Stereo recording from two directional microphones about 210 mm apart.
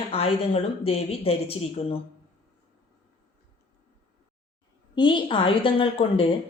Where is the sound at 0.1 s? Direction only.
30° left (ahead or behind).